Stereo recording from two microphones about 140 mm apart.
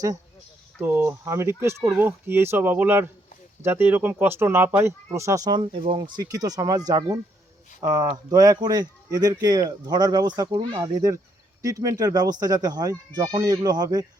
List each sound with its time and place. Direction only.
0.8 s speech: 15° right (ahead or behind)